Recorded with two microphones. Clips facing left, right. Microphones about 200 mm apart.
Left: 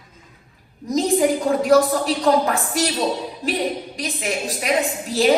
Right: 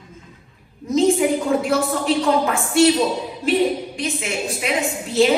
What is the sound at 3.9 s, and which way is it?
A woman's voice, 35° left (ahead or behind).